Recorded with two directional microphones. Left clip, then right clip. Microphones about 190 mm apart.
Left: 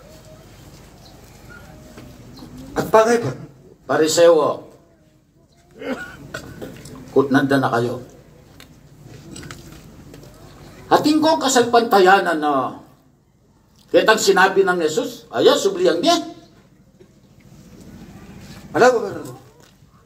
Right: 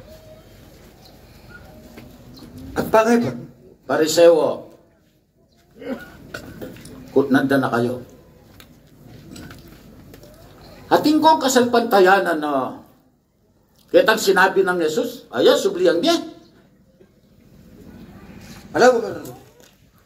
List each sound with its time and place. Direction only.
2.7 s a sound: 50° right (ahead or behind)
3.8 s a man's voice: 50° right (ahead or behind)
7.2 s a man's voice: 50° right (ahead or behind)
10.9 s a man's voice: 50° right (ahead or behind)
13.8 s a man's voice: 50° right (ahead or behind)